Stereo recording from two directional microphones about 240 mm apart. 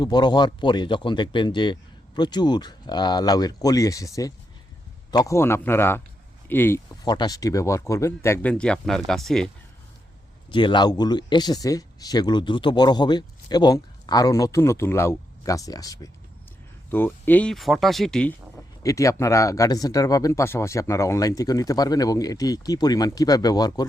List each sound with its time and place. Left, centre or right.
0.0 s speech: centre
10.5 s speech: centre